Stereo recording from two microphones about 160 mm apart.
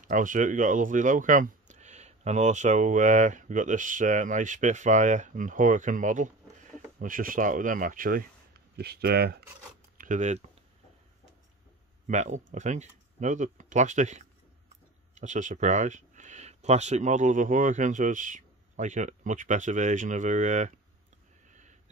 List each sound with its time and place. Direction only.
0.0 s speech: 55° right (ahead or behind)
8.7 s speech: 80° right
9.9 s speech: 50° right (ahead or behind)
12.1 s speech: 50° right (ahead or behind)
21.5 s a sound: 50° right (ahead or behind)